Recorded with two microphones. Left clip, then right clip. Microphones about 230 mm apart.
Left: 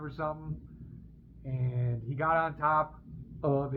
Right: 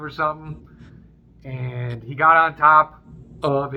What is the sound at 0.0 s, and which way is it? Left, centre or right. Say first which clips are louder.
A man's voice: right 12 dB; centre.